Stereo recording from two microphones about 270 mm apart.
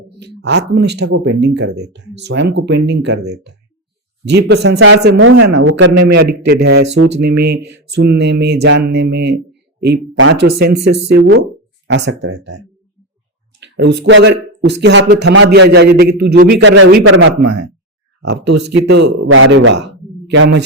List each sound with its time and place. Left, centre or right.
0.4 s speech: right
6.8 s speech: right
7.2 s speech: right
7.4 s mantra: right
7.7 s speech: right
13.6 s speech: right
18.4 s mantra: right
18.7 s speech: right